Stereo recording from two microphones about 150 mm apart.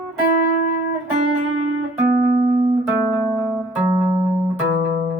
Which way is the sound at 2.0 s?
80° right.